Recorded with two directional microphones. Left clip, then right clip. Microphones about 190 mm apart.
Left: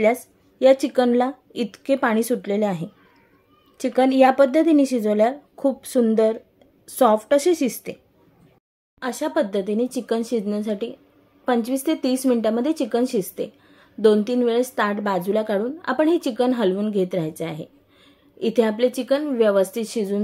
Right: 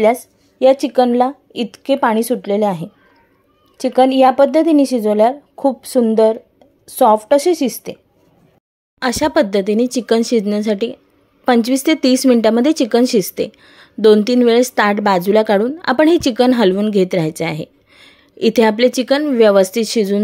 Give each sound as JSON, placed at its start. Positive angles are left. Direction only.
{"t": 0.0, "sound": "speech", "side_deg": -15}
{"t": 9.0, "sound": "speech", "side_deg": -50}